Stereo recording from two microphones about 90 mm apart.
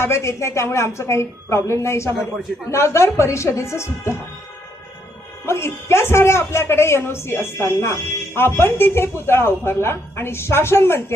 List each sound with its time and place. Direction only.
0.0 s speech: 30° left (ahead or behind)
5.5 s a woman's voice: 30° left (ahead or behind)